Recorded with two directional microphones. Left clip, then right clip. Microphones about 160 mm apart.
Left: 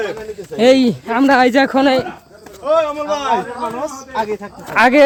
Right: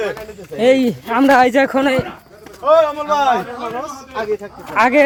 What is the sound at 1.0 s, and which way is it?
Speech, 20° left (ahead or behind).